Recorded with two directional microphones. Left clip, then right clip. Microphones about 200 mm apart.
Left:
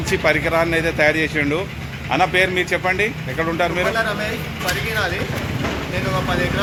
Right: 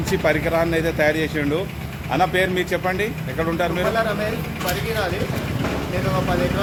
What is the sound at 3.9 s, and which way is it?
Speech, 5° left (ahead or behind).